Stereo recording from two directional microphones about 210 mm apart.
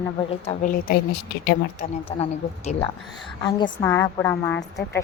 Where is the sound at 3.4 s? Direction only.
15° left (ahead or behind).